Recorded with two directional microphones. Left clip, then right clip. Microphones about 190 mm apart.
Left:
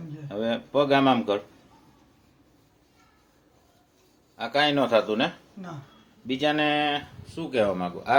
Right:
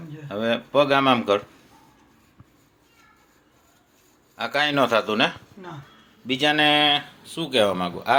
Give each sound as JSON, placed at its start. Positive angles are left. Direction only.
{"t": 0.3, "sound": "speech", "side_deg": -10}
{"t": 4.4, "sound": "speech", "side_deg": -10}